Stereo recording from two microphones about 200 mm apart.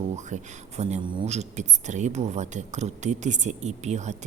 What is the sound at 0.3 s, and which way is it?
Speech, 35° right (ahead or behind).